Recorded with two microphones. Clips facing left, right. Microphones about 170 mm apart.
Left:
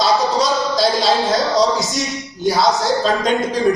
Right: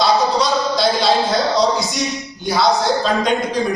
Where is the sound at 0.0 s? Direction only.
40° left (ahead or behind).